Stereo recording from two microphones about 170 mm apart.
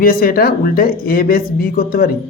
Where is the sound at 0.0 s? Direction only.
60° left (ahead or behind).